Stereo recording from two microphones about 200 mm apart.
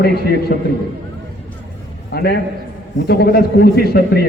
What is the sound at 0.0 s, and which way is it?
Speech, 50° left (ahead or behind).